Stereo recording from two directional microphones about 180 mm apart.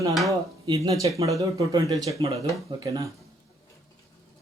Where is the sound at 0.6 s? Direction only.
30° right (ahead or behind).